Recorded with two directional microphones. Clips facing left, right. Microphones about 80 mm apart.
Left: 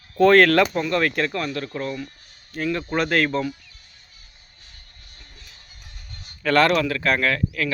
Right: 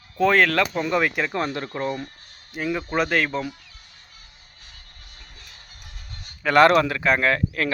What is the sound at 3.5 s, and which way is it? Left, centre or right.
Music, right.